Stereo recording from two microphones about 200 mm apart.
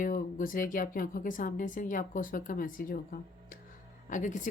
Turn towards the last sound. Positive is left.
turn(degrees=40)  # may be behind; listen again after turning